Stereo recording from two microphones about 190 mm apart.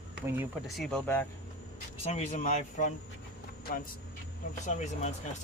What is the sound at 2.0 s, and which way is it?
Speech, 35° left (ahead or behind).